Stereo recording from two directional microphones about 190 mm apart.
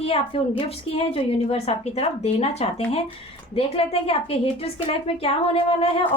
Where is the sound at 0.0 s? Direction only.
30° left (ahead or behind).